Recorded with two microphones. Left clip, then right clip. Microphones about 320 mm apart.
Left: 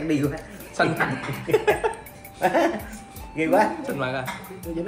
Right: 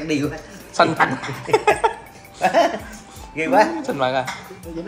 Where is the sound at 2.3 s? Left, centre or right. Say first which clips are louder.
Right 5 dB; right.